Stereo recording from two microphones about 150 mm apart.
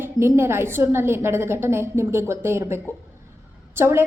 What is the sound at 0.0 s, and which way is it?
A woman's voice, 15° right (ahead or behind).